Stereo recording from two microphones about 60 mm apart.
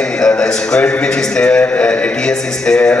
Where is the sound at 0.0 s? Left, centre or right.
Centre.